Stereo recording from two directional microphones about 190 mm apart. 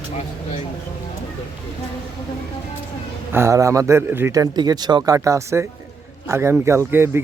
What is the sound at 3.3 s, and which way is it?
Speech, 15° right (ahead or behind).